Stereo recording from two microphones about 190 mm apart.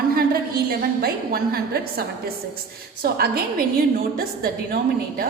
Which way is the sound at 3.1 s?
55° right (ahead or behind).